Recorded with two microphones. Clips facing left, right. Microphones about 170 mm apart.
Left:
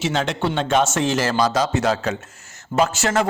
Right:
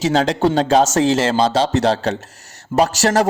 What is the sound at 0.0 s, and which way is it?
Speech, 35° right (ahead or behind).